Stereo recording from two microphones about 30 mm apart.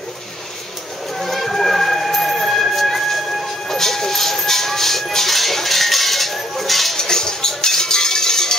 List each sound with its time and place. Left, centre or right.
1.2 s a sound: centre
3.6 s train: centre
7.0 s music: centre